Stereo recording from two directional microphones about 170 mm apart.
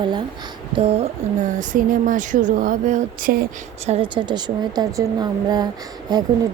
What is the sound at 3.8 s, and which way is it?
A woman's voice, 35° right (ahead or behind).